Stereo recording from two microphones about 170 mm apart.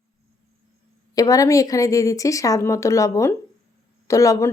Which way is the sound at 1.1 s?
20° left (ahead or behind).